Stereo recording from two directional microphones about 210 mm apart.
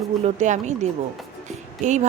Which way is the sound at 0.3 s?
35° right (ahead or behind).